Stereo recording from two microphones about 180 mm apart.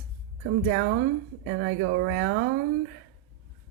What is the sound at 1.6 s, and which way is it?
Speech, 70° right (ahead or behind).